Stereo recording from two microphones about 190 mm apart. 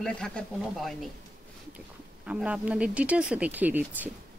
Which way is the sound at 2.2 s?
5° right (ahead or behind).